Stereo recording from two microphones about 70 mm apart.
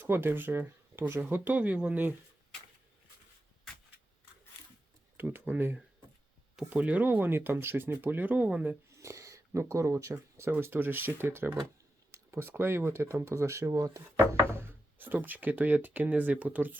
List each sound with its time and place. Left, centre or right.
0.0 s speech: right
5.1 s speech: right
9.0 s speech: right
10.5 s speech: right
14.5 s speech: right